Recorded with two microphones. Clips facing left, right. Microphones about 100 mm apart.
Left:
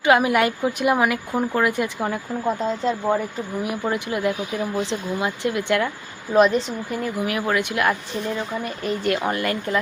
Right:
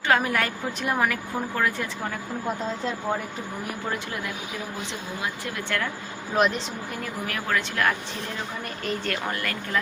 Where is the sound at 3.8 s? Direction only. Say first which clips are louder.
Left 9 dB; 25° left (ahead or behind).